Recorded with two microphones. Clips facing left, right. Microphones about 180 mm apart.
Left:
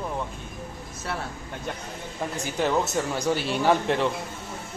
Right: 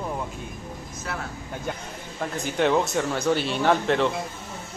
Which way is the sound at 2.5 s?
5° left (ahead or behind).